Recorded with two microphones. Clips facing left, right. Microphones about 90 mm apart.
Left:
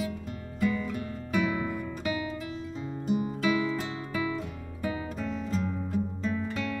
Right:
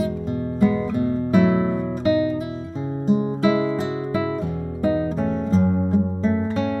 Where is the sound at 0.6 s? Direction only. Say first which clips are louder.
Right 9 dB; 30° right (ahead or behind).